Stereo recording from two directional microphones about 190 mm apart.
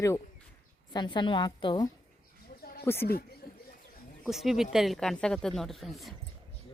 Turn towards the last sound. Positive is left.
turn(degrees=0)  # may be behind; listen again after turning